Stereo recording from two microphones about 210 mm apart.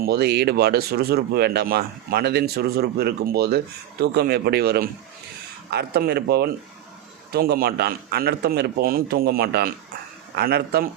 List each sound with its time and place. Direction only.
0.0 s speech: 50° right (ahead or behind)